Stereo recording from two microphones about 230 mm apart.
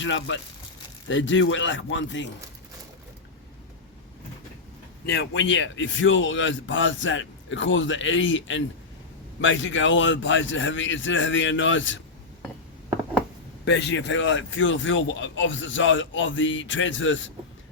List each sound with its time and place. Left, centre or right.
0.0 s speech: left
5.0 s speech: left
13.7 s speech: left